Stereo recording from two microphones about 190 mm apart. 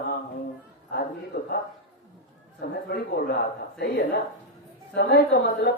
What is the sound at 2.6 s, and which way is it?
Speech, 55° left (ahead or behind).